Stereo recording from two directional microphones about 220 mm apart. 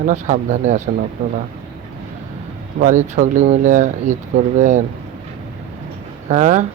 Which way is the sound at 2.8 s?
35° right (ahead or behind).